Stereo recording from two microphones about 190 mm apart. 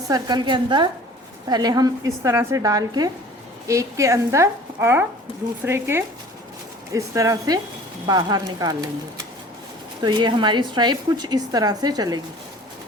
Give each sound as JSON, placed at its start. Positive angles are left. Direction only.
{"t": 0.1, "sound": "a woman's voice", "side_deg": -20}
{"t": 5.3, "sound": "speech", "side_deg": 30}
{"t": 5.6, "sound": "a woman's voice", "side_deg": -10}
{"t": 10.0, "sound": "a woman's voice", "side_deg": -25}